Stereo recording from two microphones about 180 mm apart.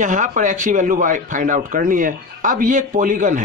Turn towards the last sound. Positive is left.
turn(degrees=-45)  # may be behind; listen again after turning